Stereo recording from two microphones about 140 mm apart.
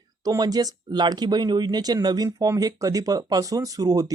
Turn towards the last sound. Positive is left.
turn(degrees=-25)  # may be behind; listen again after turning